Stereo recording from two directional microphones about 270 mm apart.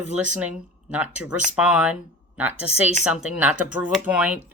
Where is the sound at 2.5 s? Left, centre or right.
Left.